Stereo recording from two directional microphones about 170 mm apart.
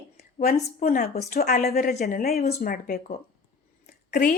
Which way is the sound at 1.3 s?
65° left (ahead or behind).